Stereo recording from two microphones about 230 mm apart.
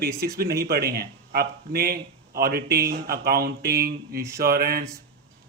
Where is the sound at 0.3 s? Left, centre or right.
Right.